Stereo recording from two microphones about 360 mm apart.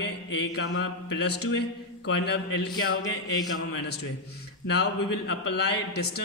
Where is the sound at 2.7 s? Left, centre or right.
Centre.